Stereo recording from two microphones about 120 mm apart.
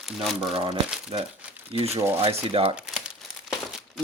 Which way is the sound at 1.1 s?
50° right (ahead or behind).